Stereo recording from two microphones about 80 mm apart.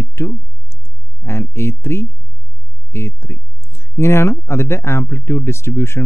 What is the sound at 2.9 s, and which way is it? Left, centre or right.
Speech, left.